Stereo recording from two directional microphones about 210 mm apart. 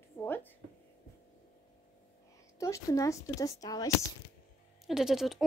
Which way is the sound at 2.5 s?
15° left (ahead or behind).